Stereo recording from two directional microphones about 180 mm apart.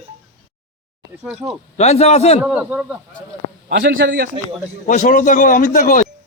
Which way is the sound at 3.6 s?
60° right (ahead or behind).